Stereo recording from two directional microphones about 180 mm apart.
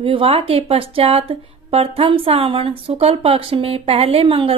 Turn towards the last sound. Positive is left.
turn(degrees=-30)  # may be behind; listen again after turning